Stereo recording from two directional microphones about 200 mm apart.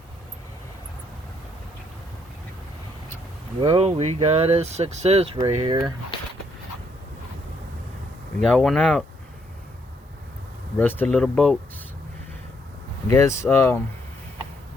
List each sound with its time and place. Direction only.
3.6 s speech: 25° right (ahead or behind)
8.4 s speech: centre (ahead or behind)
10.8 s speech: 10° left (ahead or behind)
13.1 s speech: 15° left (ahead or behind)